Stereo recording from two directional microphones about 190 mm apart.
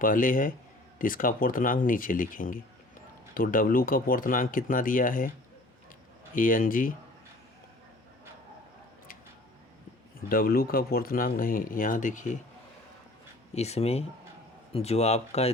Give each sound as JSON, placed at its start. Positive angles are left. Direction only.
{"t": 0.0, "sound": "speech", "side_deg": 45}
{"t": 6.3, "sound": "speech", "side_deg": 45}
{"t": 10.2, "sound": "speech", "side_deg": 50}
{"t": 13.5, "sound": "speech", "side_deg": 35}